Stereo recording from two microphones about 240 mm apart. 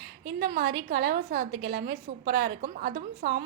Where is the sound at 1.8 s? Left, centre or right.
Right.